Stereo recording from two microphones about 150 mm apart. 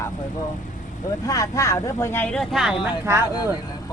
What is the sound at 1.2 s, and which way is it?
Speech, 20° left (ahead or behind).